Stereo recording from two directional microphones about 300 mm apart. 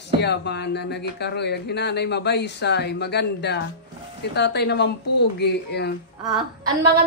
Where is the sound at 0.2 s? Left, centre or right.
Left.